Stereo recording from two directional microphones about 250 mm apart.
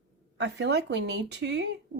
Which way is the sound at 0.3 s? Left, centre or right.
Right.